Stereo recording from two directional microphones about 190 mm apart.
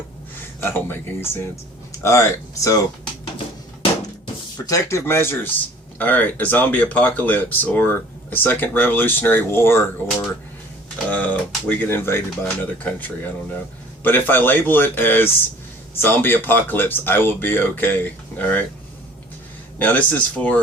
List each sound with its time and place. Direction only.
0.6 s speech: 10° left (ahead or behind)
4.5 s speech: 15° left (ahead or behind)
19.8 s speech: 10° left (ahead or behind)